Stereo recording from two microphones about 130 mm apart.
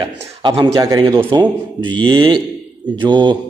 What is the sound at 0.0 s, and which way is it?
A man's voice, 50° right (ahead or behind).